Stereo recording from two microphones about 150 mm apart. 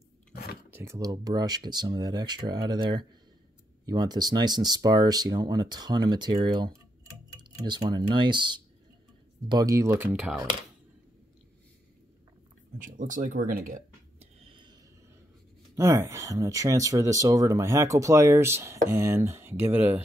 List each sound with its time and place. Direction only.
0.3 s chewing: 90° left
0.7 s speech: 15° right (ahead or behind)
10.1 s speech: 5° right (ahead or behind)
12.9 s speech: 60° right (ahead or behind)
14.4 s a sound: 35° right (ahead or behind)
15.7 s speech: 20° right (ahead or behind)